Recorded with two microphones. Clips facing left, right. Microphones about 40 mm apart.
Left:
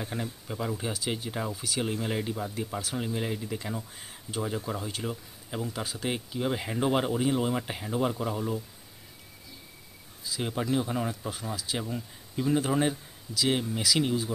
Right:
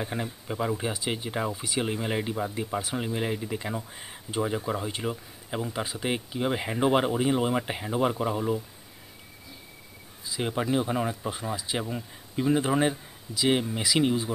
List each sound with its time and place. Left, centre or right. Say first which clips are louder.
0.0 s speech: right 3 dB; centre
10.2 s speech: right 3 dB; centre